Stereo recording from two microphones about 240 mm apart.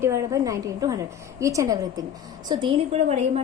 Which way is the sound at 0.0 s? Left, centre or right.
Centre.